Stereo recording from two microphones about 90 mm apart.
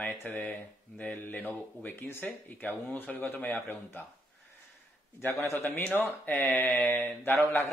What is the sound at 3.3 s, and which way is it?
Speech, 25° left (ahead or behind).